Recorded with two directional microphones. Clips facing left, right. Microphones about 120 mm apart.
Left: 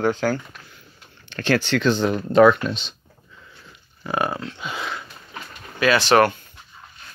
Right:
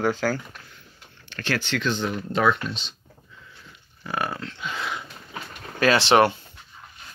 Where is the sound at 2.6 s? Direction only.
65° left (ahead or behind).